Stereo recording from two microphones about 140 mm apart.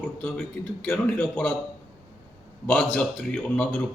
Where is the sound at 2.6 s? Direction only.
5° left (ahead or behind).